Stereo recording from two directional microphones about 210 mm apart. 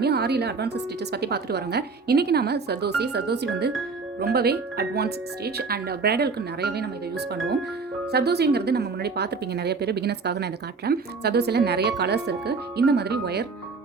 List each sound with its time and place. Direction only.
0.0 s a woman's voice: 50° right (ahead or behind)
8.1 s a woman's voice: 50° right (ahead or behind)